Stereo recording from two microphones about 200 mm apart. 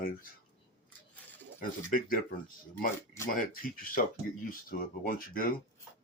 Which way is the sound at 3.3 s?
45° left (ahead or behind).